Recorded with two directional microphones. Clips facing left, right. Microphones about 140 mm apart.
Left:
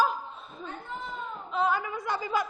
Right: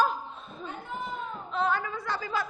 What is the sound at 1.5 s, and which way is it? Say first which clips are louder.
Speech: left 1 dB; 5° left (ahead or behind).